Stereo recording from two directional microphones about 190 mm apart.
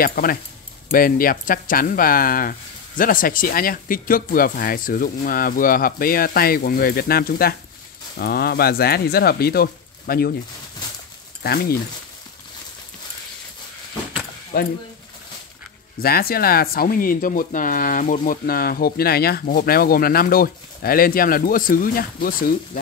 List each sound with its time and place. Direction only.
0.0 s speech: 50° left (ahead or behind)
14.5 s speech: 50° left (ahead or behind)
16.0 s speech: 50° left (ahead or behind)